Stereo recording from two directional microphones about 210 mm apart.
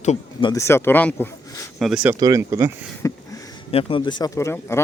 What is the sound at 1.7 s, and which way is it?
Speech, centre (ahead or behind).